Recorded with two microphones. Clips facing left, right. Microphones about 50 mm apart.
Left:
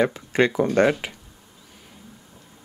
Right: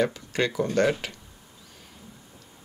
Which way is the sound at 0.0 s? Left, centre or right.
Left.